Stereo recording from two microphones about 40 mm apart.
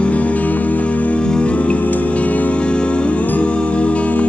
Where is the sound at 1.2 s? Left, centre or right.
Centre.